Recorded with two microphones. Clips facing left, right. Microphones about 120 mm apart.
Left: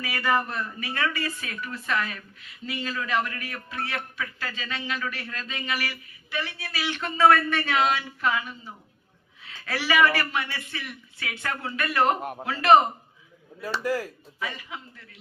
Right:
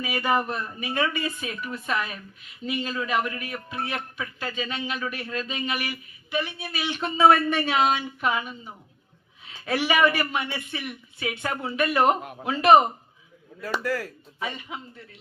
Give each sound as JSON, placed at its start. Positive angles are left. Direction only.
{"t": 0.0, "sound": "speech", "side_deg": -20}
{"t": 13.8, "sound": "speech", "side_deg": 15}
{"t": 14.3, "sound": "speech", "side_deg": -25}